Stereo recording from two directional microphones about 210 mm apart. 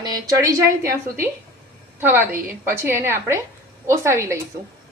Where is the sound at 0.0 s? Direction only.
15° right (ahead or behind).